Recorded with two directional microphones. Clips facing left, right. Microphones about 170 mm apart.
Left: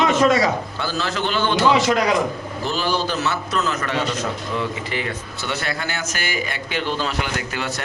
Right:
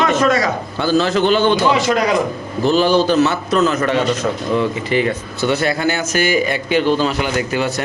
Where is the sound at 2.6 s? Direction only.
20° right (ahead or behind).